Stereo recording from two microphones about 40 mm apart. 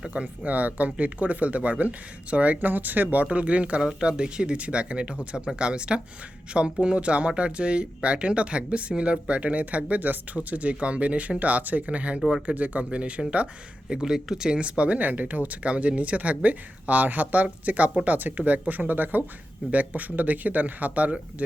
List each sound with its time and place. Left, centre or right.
0.1 s speech: right
3.3 s speech: right
14.0 s speech: centre
14.5 s speech: right
19.7 s speech: right